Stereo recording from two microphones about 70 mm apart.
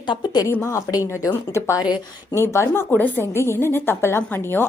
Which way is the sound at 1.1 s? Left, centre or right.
Left.